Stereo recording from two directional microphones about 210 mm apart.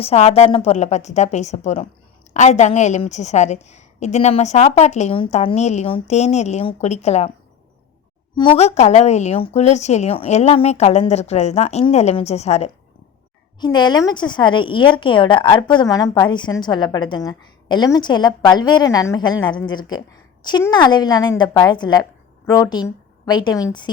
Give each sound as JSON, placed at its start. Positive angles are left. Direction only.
{"t": 0.0, "sound": "a woman's voice", "side_deg": 30}
{"t": 8.4, "sound": "a woman's voice", "side_deg": 25}
{"t": 13.6, "sound": "a woman's voice", "side_deg": 20}